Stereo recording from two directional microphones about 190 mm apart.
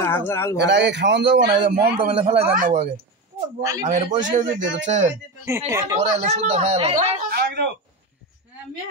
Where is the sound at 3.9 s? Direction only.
40° right (ahead or behind).